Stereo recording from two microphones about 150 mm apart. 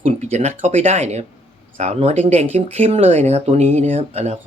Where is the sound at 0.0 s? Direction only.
50° right (ahead or behind).